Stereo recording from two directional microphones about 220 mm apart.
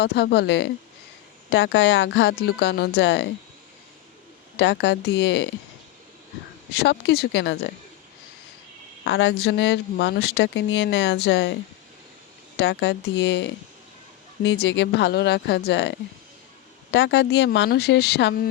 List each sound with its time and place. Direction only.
0.0 s speech: 45° left (ahead or behind)
4.5 s speech: 50° left (ahead or behind)
6.7 s speech: 50° left (ahead or behind)
9.0 s speech: 55° left (ahead or behind)
12.5 s speech: 50° left (ahead or behind)